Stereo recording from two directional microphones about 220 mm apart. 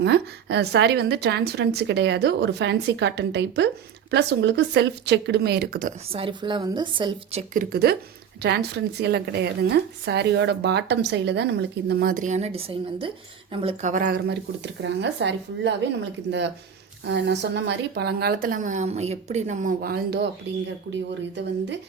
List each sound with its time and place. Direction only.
0.0 s a woman's voice: 50° right (ahead or behind)
6.1 s a woman's voice: 25° right (ahead or behind)
7.5 s a woman's voice: 40° right (ahead or behind); by 13.9 s 25° right (ahead or behind)
13.9 s a woman's voice: 40° right (ahead or behind)
17.1 s a woman's voice: 50° right (ahead or behind)